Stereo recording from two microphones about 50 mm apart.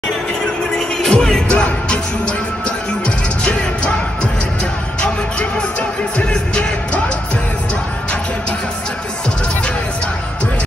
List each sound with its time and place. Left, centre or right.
0.7 s music: centre
3.4 s music: left